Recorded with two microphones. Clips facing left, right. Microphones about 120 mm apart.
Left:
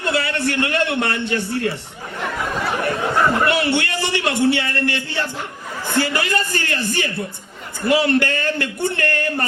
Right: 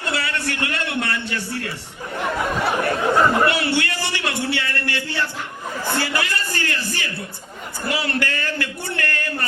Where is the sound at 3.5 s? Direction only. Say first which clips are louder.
Left 3 dB; 20° left (ahead or behind).